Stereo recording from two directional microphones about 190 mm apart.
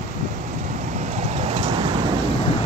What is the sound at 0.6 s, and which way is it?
Vehicle, 40° right (ahead or behind).